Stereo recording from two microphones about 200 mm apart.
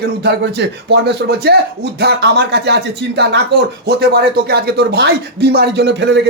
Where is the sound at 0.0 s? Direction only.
55° right (ahead or behind).